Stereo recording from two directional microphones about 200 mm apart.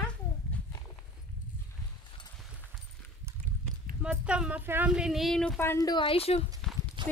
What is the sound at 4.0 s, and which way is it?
Speech, 5° right (ahead or behind).